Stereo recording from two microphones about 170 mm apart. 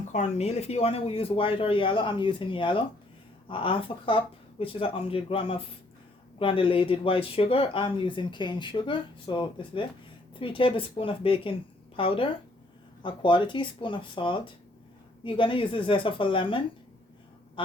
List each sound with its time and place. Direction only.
0.1 s speech: 40° left (ahead or behind)